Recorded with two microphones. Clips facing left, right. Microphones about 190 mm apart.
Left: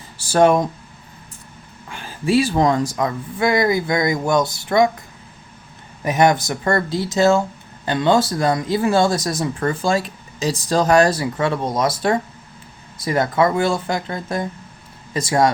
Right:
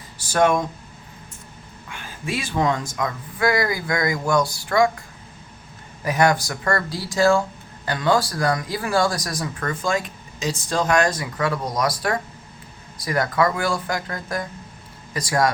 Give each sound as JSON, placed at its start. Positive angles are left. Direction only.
{"t": 0.2, "sound": "speech", "side_deg": 30}
{"t": 1.9, "sound": "speech", "side_deg": 35}
{"t": 6.1, "sound": "speech", "side_deg": 20}